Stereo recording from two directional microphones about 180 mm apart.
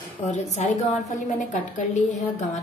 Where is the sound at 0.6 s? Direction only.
40° left (ahead or behind).